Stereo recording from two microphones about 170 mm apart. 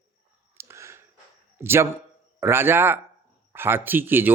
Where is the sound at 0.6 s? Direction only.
15° right (ahead or behind).